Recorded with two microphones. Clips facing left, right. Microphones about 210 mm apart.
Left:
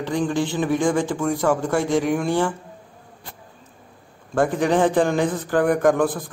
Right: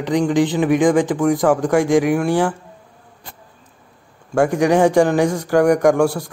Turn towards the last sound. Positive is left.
turn(degrees=-10)  # may be behind; listen again after turning